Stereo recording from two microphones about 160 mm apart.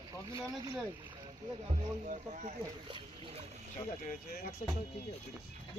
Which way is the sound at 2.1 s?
50° right (ahead or behind).